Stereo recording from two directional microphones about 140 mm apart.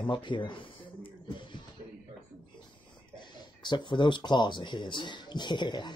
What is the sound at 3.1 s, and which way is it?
Speech, 30° left (ahead or behind).